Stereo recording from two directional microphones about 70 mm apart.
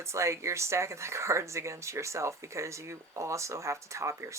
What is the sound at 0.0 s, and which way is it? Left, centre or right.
Speech, right.